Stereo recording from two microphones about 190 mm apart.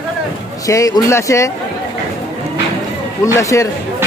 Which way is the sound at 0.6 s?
15° left (ahead or behind).